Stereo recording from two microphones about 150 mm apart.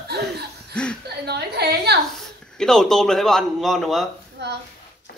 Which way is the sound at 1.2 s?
90° right.